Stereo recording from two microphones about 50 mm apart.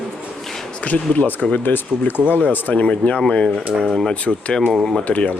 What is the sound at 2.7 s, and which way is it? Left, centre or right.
Speech, left.